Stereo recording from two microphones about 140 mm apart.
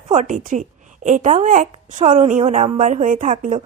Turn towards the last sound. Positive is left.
turn(degrees=-60)  # may be behind; listen again after turning